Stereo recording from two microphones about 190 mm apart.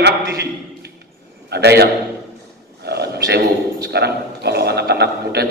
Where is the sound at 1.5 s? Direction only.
60° right (ahead or behind).